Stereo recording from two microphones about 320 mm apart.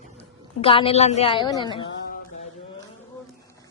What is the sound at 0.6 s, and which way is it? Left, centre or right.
A woman's voice, centre.